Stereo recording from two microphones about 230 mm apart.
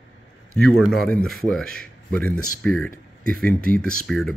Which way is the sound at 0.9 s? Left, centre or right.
Centre.